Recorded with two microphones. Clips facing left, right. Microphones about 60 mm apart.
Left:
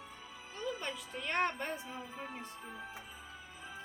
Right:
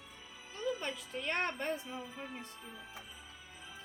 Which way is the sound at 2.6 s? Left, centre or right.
Left.